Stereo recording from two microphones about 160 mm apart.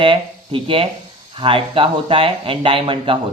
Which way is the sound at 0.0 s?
30° right (ahead or behind).